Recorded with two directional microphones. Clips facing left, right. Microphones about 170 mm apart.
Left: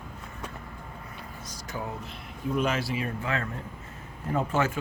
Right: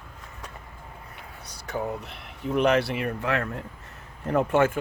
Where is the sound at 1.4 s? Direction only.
65° right (ahead or behind).